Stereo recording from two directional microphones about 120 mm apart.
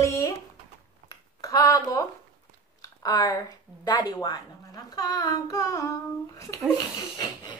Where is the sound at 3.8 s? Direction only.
35° left (ahead or behind).